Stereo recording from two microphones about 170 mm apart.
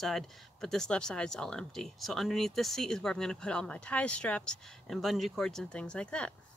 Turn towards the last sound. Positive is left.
turn(degrees=5)  # may be behind; listen again after turning